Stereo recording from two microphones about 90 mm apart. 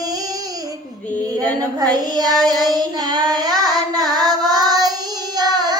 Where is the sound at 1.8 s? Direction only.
45° right (ahead or behind).